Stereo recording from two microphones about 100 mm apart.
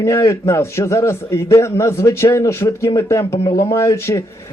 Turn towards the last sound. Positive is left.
turn(degrees=30)  # may be behind; listen again after turning